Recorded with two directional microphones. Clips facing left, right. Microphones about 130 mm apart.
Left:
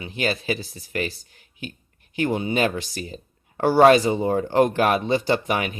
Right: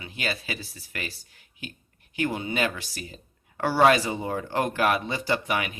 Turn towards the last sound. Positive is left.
turn(degrees=35)  # may be behind; listen again after turning